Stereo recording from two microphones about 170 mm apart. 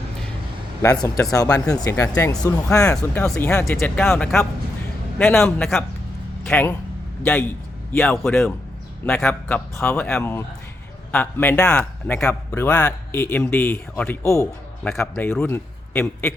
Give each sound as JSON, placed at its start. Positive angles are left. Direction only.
{"t": 0.8, "sound": "speech", "side_deg": 20}
{"t": 2.9, "sound": "a man's voice", "side_deg": 5}
{"t": 3.3, "sound": "a man's voice", "side_deg": 15}